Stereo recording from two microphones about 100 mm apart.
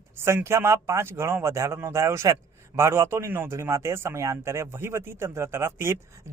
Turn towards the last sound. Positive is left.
turn(degrees=-25)  # may be behind; listen again after turning